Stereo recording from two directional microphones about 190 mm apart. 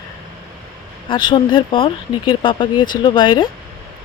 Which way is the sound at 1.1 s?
25° left (ahead or behind).